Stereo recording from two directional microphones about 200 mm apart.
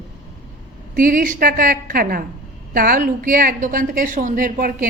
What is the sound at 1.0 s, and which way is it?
A woman's voice, 45° right (ahead or behind).